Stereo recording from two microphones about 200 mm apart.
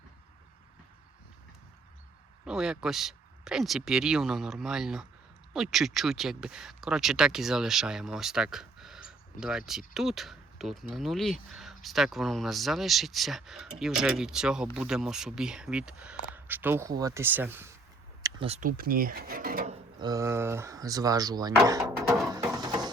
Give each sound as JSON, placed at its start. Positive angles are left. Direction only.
{"t": 2.4, "sound": "speech", "side_deg": -5}
{"t": 18.2, "sound": "a sound", "side_deg": -20}
{"t": 18.4, "sound": "speech", "side_deg": -35}
{"t": 18.8, "sound": "speech", "side_deg": -45}
{"t": 20.0, "sound": "speech", "side_deg": -15}
{"t": 22.5, "sound": "music", "side_deg": -20}